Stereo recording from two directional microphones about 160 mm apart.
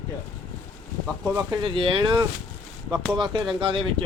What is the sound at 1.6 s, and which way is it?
Speech, 30° right (ahead or behind).